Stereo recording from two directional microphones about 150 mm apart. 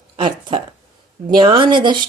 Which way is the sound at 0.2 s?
35° right (ahead or behind).